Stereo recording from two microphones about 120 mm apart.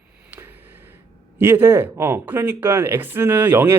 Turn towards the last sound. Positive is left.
turn(degrees=-20)  # may be behind; listen again after turning